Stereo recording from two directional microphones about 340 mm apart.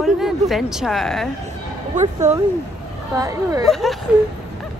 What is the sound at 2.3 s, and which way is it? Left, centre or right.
Speech, centre.